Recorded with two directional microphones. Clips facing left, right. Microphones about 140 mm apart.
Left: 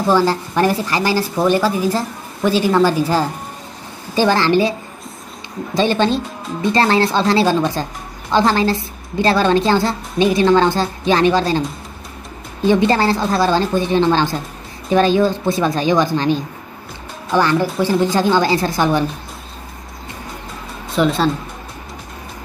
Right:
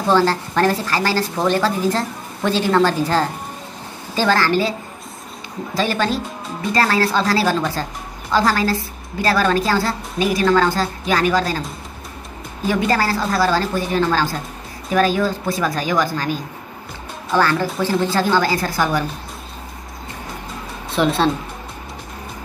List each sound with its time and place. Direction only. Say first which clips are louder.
0.0 s a woman's voice: left 1 dB; 10° left (ahead or behind)
5.8 s a woman's voice: left 4 dB; 25° left (ahead or behind)
12.6 s a woman's voice: left 5 dB; 25° left (ahead or behind)
20.9 s speech: left 1 dB; centre (ahead or behind)